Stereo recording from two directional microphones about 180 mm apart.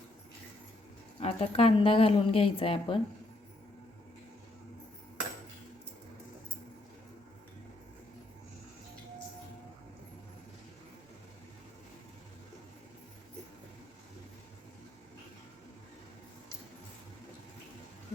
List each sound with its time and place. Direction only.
1.2 s speech: 35° left (ahead or behind)